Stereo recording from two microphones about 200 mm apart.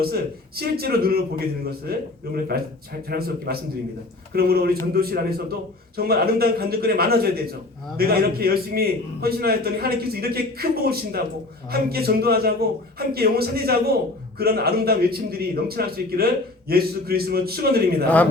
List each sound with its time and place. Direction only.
0.0 s a man's voice: 50° right (ahead or behind)